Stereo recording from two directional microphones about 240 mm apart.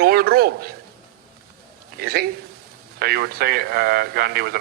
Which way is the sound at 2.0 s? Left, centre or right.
Right.